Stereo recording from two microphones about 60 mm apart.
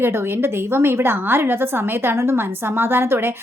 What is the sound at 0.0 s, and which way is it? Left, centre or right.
A woman's voice, right.